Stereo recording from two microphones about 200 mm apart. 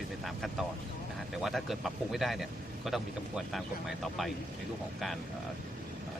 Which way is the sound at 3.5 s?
Centre (ahead or behind).